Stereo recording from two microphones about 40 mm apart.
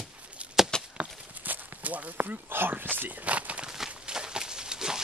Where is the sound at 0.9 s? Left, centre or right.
Right.